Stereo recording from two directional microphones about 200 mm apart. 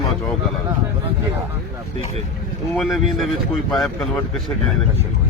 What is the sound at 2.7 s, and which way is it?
Speech, centre (ahead or behind).